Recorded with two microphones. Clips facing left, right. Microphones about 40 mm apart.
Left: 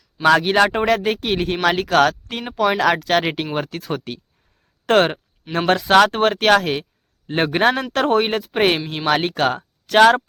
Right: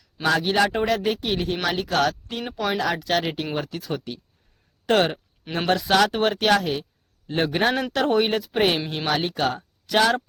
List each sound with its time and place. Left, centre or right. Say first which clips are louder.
0.3 s speech: left 6 dB; left
0.7 s a man's voice: left 5 dB; left
0.9 s speech: left 3 dB; left
1.2 s speech: left 4 dB; left
1.6 s speech: left 8 dB; left
4.9 s a man's voice: left 4 dB; left
7.3 s a man's voice: left 5 dB; left
9.0 s speech: left 6 dB; left